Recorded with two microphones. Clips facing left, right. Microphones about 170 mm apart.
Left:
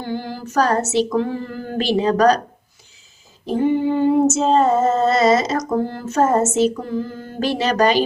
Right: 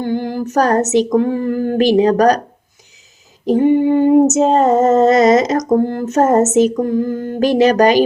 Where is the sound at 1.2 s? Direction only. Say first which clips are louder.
Right 8 dB; 55° right (ahead or behind).